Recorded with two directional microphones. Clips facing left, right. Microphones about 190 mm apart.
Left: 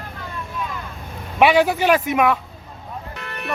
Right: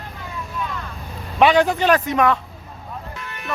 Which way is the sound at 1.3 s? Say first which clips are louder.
Even; 10° left (ahead or behind).